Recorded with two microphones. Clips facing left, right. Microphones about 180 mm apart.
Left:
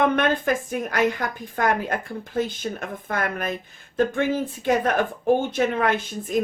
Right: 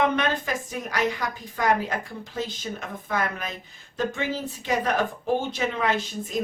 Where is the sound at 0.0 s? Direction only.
55° left (ahead or behind).